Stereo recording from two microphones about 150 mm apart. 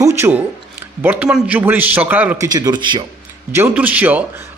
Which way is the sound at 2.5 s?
25° right (ahead or behind).